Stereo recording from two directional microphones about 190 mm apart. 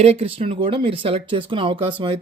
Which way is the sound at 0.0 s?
30° right (ahead or behind).